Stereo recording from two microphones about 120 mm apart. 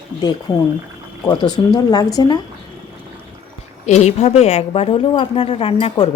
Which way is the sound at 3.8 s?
70° left (ahead or behind).